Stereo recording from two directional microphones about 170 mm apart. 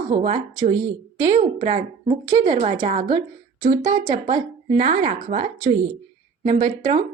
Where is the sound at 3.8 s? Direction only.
20° right (ahead or behind).